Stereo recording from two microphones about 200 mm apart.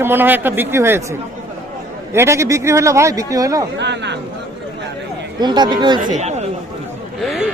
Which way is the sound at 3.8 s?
60° right (ahead or behind).